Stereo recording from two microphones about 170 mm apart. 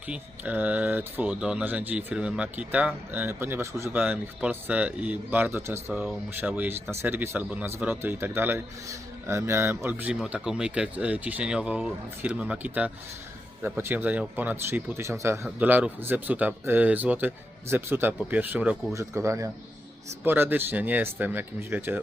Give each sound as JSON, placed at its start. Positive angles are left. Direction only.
{"t": 0.1, "sound": "speech", "side_deg": -10}